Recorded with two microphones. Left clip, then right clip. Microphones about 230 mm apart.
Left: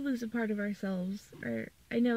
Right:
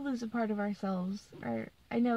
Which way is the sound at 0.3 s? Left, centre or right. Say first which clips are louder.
Right 1 dB; right.